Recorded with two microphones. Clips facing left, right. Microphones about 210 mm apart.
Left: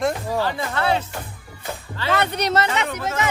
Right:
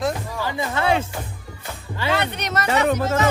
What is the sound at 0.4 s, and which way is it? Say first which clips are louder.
Speech: right 5 dB; 15° right (ahead or behind).